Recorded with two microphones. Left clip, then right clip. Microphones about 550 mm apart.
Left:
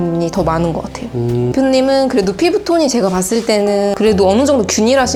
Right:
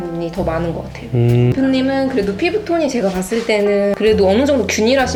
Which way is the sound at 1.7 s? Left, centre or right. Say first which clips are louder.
Left 5 dB; left.